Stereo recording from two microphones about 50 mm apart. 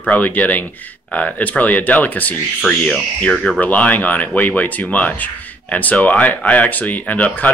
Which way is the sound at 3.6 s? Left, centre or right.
Left.